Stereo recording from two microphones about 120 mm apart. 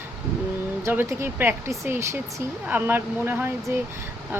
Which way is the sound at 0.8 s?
20° right (ahead or behind).